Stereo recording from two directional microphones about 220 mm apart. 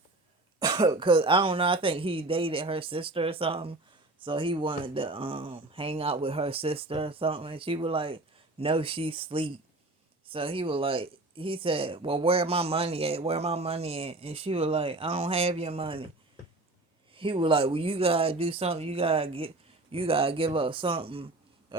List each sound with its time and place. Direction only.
0.6 s speech: 20° right (ahead or behind)
17.2 s speech: 25° right (ahead or behind)
21.7 s a sound: 25° right (ahead or behind)